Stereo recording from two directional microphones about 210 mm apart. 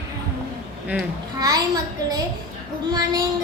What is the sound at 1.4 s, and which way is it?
Speech, 20° right (ahead or behind).